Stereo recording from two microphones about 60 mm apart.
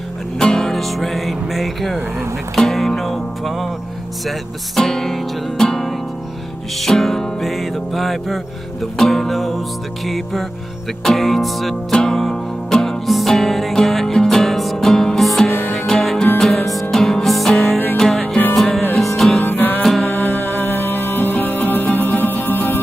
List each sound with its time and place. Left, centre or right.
0.4 s speech: centre
2.5 s music: centre
4.3 s speech: centre
6.8 s music: centre
15.5 s music: left
15.9 s music: centre
19.4 s music: left
19.8 s music: centre
20.1 s music: left